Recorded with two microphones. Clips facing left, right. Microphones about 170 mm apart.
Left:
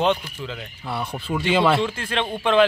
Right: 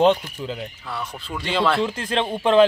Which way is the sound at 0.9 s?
30° left (ahead or behind).